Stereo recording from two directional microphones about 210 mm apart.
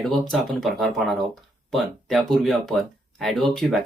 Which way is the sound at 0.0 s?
Centre (ahead or behind).